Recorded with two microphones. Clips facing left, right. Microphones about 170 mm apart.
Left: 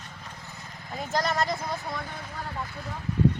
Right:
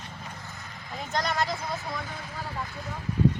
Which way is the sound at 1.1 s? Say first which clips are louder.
Left 2 dB; centre (ahead or behind).